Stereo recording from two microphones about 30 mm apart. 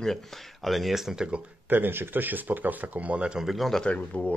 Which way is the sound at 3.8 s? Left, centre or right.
Left.